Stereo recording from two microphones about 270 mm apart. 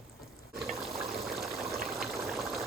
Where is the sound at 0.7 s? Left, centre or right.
Centre.